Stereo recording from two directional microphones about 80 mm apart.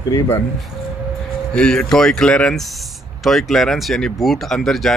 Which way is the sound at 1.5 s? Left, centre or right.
Centre.